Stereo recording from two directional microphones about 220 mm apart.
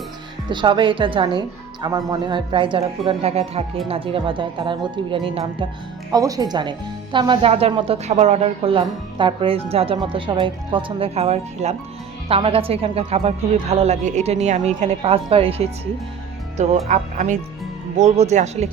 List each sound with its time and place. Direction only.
0.5 s speech: 20° right (ahead or behind)